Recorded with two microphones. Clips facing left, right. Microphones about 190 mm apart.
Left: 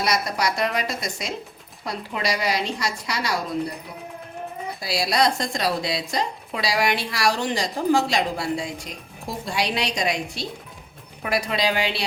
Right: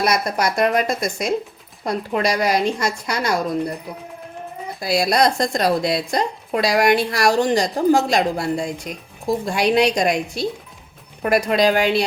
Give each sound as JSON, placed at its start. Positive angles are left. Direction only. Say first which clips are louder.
{"t": 0.0, "sound": "a woman's voice", "louder": "right 4 dB", "side_deg": -50}
{"t": 4.8, "sound": "a woman's voice", "louder": "right 5 dB", "side_deg": -50}